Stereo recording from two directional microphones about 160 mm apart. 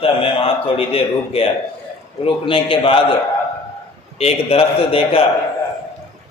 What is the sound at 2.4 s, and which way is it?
Speech, 35° left (ahead or behind).